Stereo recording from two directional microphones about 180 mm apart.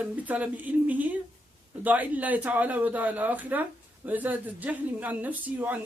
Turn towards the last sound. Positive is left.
turn(degrees=-10)  # may be behind; listen again after turning